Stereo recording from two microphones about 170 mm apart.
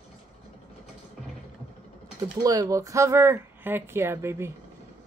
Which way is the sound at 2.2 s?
20° right (ahead or behind).